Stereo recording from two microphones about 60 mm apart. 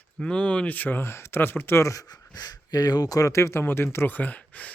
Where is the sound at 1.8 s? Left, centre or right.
Left.